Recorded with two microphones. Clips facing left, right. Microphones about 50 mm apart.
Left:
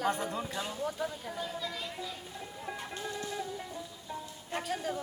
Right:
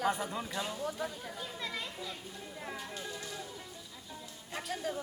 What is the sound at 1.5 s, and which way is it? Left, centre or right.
Speech, centre.